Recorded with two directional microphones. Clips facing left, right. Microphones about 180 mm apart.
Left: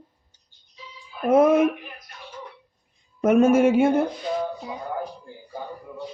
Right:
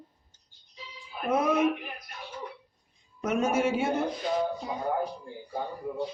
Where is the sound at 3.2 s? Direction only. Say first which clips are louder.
Left 10 dB; 50° left (ahead or behind).